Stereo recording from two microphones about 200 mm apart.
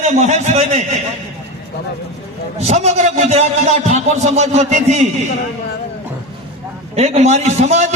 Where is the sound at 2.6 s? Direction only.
35° right (ahead or behind).